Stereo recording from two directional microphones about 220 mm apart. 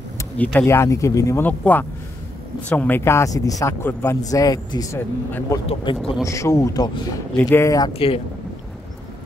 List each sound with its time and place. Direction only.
0.2 s a man's voice: 5° left (ahead or behind); by 8.2 s 20° left (ahead or behind)